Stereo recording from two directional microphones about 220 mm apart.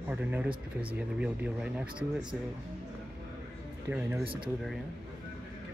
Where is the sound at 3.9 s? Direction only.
5° right (ahead or behind).